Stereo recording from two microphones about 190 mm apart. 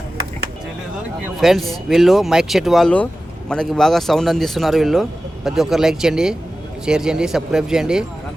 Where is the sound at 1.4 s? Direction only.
Centre (ahead or behind).